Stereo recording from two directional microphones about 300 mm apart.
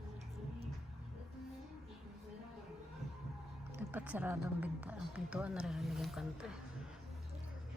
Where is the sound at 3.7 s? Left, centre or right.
Centre.